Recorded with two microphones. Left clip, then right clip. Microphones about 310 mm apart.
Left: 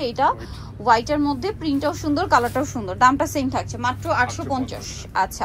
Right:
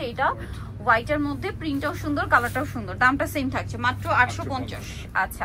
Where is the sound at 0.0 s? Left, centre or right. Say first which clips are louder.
Left 5 dB; centre.